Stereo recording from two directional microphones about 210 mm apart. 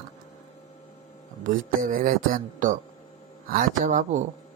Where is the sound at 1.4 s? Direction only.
40° right (ahead or behind).